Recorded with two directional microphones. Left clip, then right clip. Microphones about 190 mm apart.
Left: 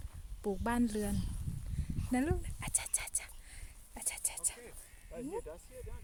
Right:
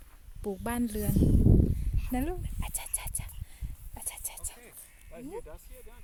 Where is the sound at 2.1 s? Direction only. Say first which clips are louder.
Right 1 dB; 10° right (ahead or behind).